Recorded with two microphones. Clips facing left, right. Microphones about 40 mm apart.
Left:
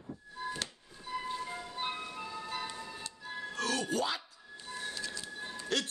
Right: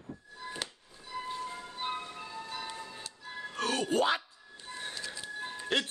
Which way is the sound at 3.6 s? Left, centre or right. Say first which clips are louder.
Right 4 dB; right.